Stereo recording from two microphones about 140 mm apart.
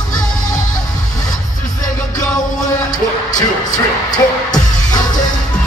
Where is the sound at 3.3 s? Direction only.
30° left (ahead or behind).